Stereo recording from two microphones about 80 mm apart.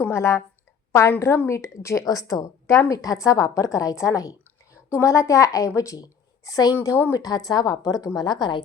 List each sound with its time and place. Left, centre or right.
0.1 s a woman's voice: left
6.8 s a woman's voice: left
7.2 s a woman's voice: left